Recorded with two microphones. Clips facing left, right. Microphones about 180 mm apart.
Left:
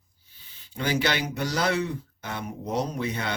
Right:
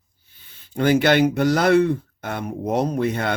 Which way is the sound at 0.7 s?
55° right (ahead or behind).